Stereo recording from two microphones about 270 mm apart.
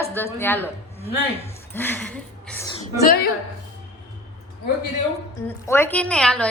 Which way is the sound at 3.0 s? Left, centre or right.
Left.